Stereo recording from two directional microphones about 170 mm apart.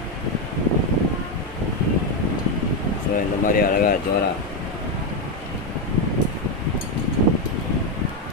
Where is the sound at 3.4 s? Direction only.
55° left (ahead or behind).